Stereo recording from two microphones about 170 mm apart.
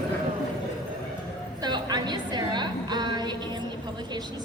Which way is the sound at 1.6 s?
25° right (ahead or behind).